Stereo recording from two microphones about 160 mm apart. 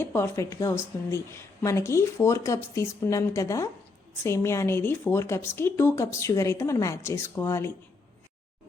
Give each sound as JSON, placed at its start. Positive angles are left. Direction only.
{"t": 0.0, "sound": "a woman's voice", "side_deg": 15}